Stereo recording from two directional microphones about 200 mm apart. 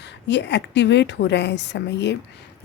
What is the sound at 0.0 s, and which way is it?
A woman's voice, 60° left (ahead or behind).